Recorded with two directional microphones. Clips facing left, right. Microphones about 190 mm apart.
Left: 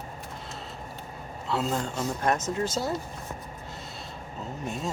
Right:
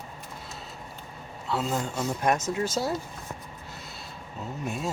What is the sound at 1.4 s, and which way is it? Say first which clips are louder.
A man's voice: even; centre (ahead or behind).